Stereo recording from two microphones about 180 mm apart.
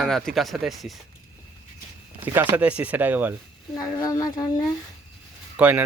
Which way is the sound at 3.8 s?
20° left (ahead or behind).